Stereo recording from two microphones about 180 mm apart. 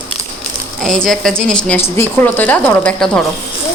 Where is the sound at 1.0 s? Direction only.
5° left (ahead or behind).